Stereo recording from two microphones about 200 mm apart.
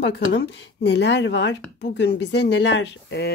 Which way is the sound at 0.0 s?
60° left (ahead or behind).